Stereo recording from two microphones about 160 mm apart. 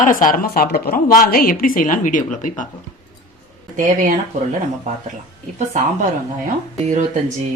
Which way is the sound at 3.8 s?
50° right (ahead or behind).